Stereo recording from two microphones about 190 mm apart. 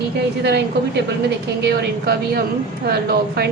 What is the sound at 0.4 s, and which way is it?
A woman's voice, 60° right (ahead or behind).